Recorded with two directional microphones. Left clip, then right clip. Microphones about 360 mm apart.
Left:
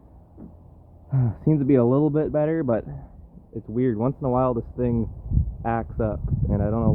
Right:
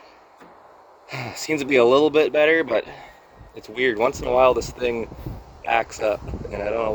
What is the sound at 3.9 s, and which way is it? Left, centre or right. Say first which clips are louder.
Speech: right 5 dB; centre.